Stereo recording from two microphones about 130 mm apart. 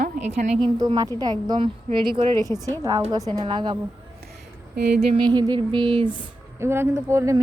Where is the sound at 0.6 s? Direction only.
40° right (ahead or behind).